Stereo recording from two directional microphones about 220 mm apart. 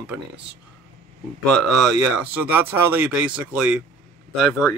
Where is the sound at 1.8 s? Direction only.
5° right (ahead or behind).